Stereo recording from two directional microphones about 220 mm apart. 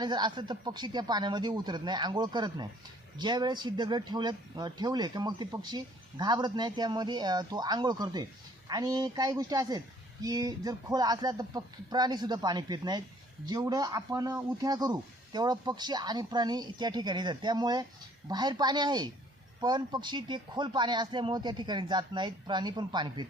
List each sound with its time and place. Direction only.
0.0 s speech: 20° right (ahead or behind)